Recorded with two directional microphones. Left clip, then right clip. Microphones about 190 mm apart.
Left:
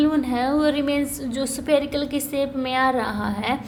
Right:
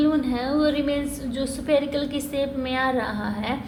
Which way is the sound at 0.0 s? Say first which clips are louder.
Left 2 dB; 35° left (ahead or behind).